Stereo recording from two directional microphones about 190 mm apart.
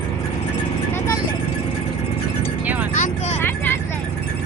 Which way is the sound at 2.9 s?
40° left (ahead or behind).